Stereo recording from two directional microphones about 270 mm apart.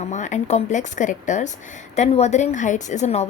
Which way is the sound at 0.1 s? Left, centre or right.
Left.